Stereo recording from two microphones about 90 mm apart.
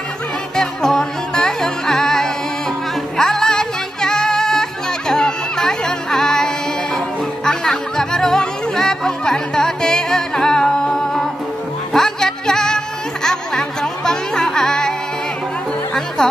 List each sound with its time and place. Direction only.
0.6 s music: 5° left (ahead or behind)